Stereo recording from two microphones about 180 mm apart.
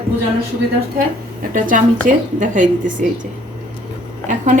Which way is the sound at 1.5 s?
50° right (ahead or behind).